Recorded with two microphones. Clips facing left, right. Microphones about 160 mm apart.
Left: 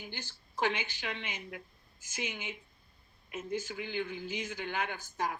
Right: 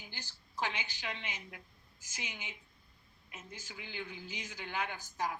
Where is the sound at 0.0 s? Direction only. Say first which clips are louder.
Left 6 dB; 60° left (ahead or behind).